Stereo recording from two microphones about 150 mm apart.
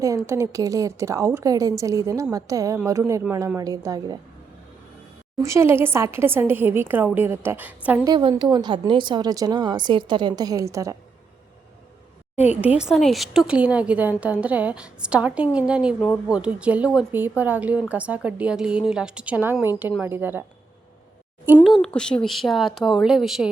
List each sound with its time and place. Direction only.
0.0 s speech: 20° right (ahead or behind)
5.4 s a woman's voice: 20° right (ahead or behind)
8.0 s speech: 30° right (ahead or behind)
12.6 s a woman's voice: 5° right (ahead or behind)
21.6 s speech: centre (ahead or behind)